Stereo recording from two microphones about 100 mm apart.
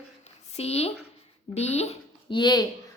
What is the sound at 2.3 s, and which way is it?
Speech, 45° left (ahead or behind).